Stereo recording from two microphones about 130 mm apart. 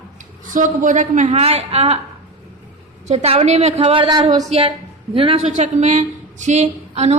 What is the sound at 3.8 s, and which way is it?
Speech, 40° right (ahead or behind).